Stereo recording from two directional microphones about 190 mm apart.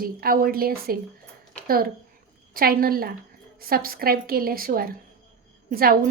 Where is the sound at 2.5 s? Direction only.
50° right (ahead or behind).